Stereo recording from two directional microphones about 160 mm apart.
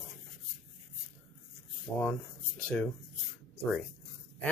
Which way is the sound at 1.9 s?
15° left (ahead or behind).